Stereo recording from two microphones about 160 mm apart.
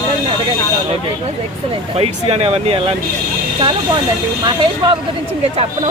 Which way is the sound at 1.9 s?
40° right (ahead or behind).